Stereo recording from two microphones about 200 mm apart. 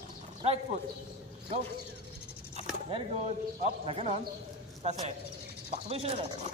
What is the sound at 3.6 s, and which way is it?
Speech, 30° right (ahead or behind).